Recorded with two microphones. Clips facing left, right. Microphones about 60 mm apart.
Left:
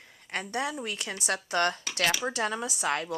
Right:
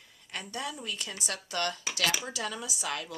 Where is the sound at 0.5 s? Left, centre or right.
Left.